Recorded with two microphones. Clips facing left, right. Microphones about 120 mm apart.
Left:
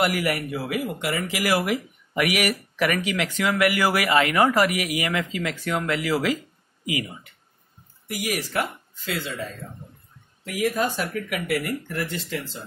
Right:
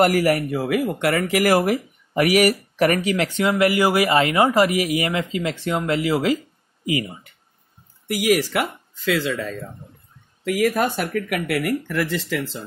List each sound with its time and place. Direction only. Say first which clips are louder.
0.0 s speech: right 6 dB; 40° right (ahead or behind)
8.1 s speech: right 9 dB; 90° right
10.4 s speech: right 5 dB; 90° right
11.0 s speech: right 4 dB; 55° right (ahead or behind)
11.9 s speech: right 6 dB; 90° right